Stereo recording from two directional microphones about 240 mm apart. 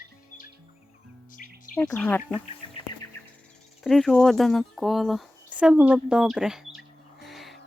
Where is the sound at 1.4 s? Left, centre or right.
Left.